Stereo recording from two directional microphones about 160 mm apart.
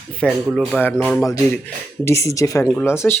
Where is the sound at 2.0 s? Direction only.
20° left (ahead or behind).